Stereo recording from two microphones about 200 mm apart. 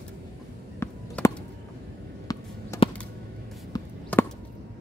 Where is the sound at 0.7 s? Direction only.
10° left (ahead or behind).